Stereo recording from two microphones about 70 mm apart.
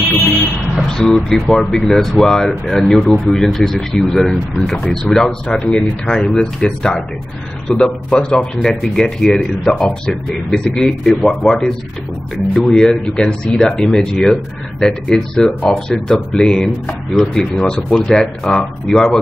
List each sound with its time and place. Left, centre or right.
0.7 s speech: centre